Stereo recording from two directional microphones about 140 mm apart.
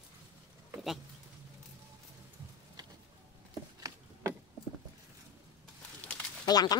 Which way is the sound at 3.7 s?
25° right (ahead or behind).